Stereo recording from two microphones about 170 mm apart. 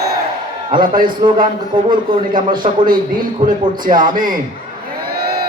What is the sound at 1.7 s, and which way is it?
Speech, 25° right (ahead or behind).